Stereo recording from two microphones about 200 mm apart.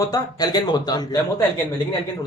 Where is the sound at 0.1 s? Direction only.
20° left (ahead or behind).